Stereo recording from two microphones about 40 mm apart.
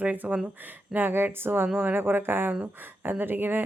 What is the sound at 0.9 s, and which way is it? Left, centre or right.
Speech, right.